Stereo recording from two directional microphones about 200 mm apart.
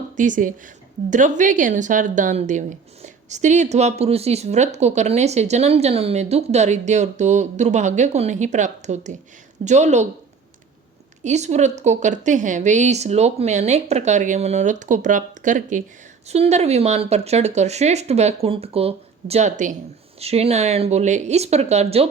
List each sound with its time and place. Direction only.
0.2 s a woman's voice: 40° right (ahead or behind)
11.2 s a woman's voice: 35° right (ahead or behind)